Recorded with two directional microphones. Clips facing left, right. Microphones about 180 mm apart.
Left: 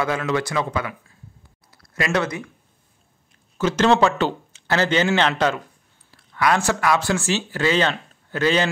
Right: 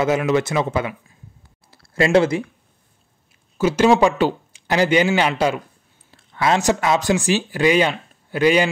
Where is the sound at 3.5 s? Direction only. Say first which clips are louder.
Right 3 dB; 10° right (ahead or behind).